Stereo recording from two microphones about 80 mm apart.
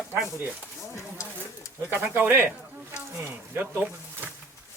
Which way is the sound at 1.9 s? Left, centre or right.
Right.